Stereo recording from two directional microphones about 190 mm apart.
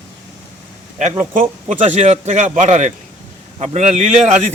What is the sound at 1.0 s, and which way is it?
A man's voice, 40° right (ahead or behind).